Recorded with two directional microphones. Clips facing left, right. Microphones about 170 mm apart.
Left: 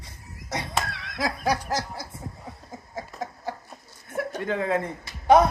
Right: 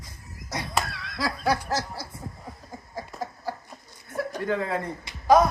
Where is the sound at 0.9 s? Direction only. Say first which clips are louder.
Left 1 dB; 20° left (ahead or behind).